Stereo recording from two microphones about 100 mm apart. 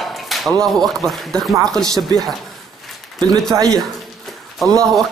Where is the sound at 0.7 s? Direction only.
Centre (ahead or behind).